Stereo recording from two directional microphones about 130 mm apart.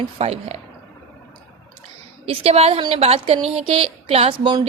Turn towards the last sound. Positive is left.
turn(degrees=-45)  # may be behind; listen again after turning